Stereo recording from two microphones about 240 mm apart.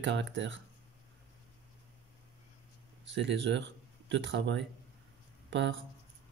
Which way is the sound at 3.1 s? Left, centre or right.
Right.